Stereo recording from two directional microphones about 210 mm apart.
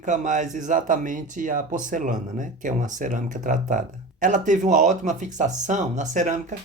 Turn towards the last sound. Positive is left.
turn(degrees=-35)  # may be behind; listen again after turning